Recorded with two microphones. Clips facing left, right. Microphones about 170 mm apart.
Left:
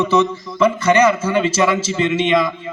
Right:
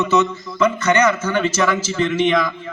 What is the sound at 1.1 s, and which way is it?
A man's voice, 30° left (ahead or behind).